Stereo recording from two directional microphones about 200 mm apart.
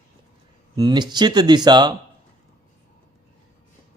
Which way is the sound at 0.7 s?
20° right (ahead or behind).